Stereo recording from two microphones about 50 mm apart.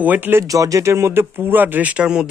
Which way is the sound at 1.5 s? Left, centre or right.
Right.